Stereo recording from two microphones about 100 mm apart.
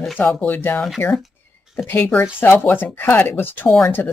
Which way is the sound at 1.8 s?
20° left (ahead or behind).